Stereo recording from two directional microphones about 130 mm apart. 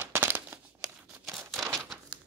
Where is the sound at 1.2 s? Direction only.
Centre (ahead or behind).